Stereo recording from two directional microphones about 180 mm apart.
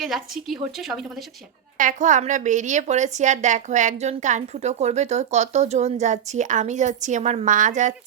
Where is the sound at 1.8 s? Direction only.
45° right (ahead or behind).